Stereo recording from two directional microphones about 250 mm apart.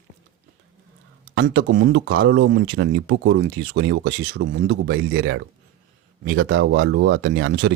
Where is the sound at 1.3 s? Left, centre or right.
Right.